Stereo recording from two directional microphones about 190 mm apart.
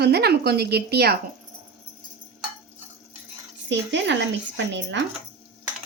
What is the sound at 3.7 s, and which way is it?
Speech, 70° right (ahead or behind).